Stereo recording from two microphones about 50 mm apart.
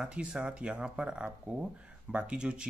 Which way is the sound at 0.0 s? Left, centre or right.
Centre.